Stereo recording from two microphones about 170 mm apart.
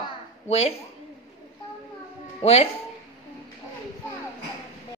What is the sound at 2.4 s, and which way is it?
Speech, 35° left (ahead or behind).